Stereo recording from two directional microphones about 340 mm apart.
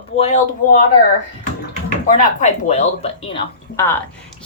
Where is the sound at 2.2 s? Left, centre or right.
Left.